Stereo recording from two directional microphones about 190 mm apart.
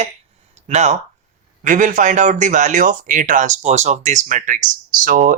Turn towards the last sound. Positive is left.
turn(degrees=-45)  # may be behind; listen again after turning